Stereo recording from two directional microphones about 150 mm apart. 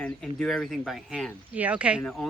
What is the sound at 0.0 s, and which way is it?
Speech, 5° left (ahead or behind).